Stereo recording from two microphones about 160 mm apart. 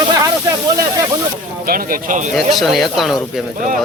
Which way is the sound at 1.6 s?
65° right (ahead or behind).